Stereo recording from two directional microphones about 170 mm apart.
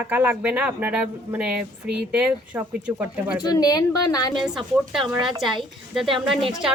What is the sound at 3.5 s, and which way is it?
Speech, 20° left (ahead or behind).